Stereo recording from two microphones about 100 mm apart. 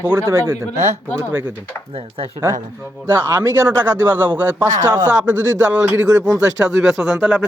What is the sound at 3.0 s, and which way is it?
A man's voice, 25° right (ahead or behind).